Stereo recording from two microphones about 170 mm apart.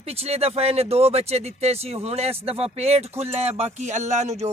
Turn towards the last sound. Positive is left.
turn(degrees=-40)  # may be behind; listen again after turning